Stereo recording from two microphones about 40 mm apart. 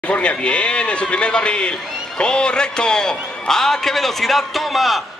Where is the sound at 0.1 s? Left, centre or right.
Left.